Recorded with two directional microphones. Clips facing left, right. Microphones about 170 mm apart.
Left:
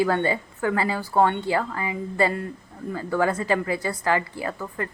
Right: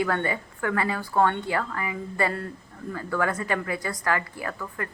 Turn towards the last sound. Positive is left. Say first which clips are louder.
# left 3 dB
turn(degrees=25)  # may be behind; listen again after turning